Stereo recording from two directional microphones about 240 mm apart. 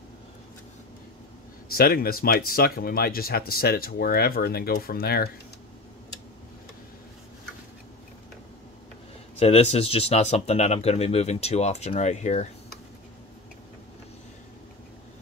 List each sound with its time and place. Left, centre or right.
1.7 s speech: left
9.4 s speech: left